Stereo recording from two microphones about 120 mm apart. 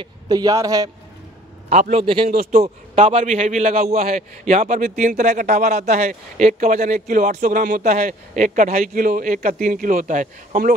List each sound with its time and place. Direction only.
0.0 s a man's voice: 35° right (ahead or behind)
1.7 s a man's voice: 65° right (ahead or behind)
2.5 s a man's voice: 65° right (ahead or behind); by 10.6 s 90° right